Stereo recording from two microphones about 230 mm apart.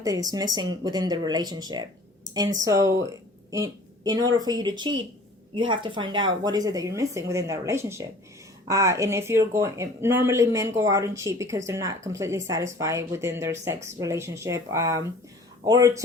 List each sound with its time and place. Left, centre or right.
0.0 s speech: centre